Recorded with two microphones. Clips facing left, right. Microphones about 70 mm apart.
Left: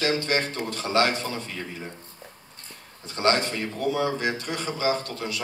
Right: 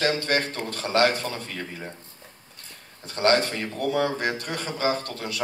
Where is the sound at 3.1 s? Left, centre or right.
Right.